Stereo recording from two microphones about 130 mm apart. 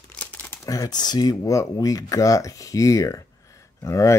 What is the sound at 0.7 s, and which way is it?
Speech, 30° left (ahead or behind).